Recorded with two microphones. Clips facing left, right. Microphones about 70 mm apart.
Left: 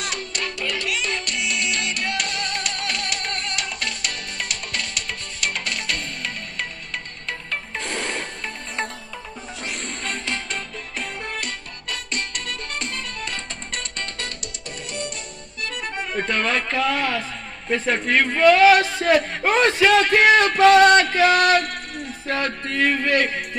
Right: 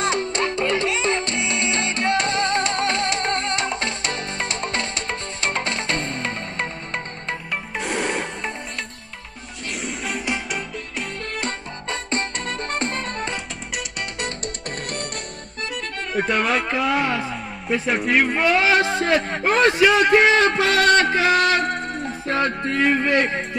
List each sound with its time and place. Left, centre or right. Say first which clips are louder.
0.0 s music: right 7 dB; right
7.7 s music: right 5 dB; centre
9.8 s music: right 6 dB; centre
11.4 s music: right 4 dB; right
16.1 s music: right 3 dB; centre
17.6 s a man's voice: even; centre
21.0 s music: left 1 dB; right